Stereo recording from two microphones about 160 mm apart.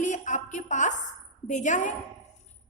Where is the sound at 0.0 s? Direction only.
50° left (ahead or behind).